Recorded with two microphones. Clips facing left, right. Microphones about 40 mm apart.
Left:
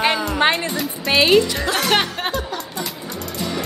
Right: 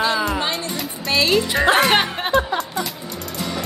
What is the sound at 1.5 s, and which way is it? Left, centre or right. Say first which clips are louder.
Speech: right 6 dB; right.